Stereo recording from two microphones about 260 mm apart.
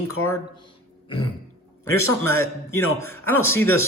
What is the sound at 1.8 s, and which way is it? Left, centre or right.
A man's voice, centre.